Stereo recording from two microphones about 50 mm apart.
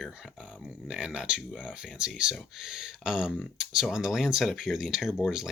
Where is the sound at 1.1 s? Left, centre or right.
Centre.